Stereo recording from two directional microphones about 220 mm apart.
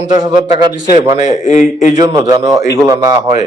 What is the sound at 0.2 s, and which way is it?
Speech, 20° right (ahead or behind).